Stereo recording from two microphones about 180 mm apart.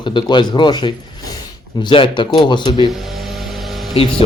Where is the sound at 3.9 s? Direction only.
30° left (ahead or behind).